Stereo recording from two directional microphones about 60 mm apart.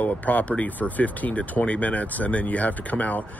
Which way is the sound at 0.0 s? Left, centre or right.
Left.